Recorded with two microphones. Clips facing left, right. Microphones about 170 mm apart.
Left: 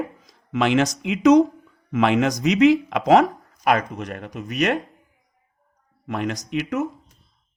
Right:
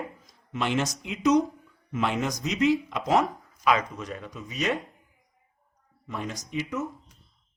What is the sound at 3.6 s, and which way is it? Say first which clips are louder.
Speech: left 4 dB; 55° left (ahead or behind).